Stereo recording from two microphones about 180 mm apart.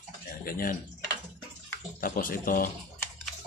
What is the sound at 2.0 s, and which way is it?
Speech, 50° left (ahead or behind).